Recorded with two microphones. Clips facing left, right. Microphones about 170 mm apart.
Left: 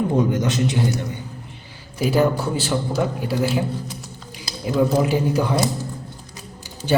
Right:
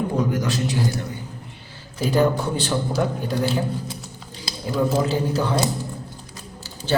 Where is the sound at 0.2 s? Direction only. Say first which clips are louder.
Left 3 dB; 20° left (ahead or behind).